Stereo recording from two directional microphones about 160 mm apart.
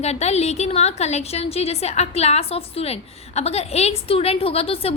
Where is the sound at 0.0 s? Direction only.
40° left (ahead or behind).